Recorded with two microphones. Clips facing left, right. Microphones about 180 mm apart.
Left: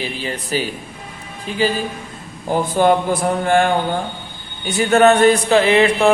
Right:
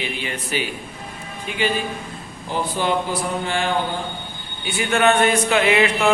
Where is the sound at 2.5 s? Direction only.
50° left (ahead or behind).